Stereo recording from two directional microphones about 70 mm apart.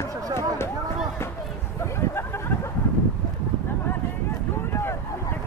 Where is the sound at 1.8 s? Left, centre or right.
Left.